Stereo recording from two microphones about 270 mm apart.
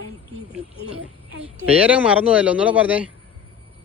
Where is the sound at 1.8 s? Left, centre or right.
Centre.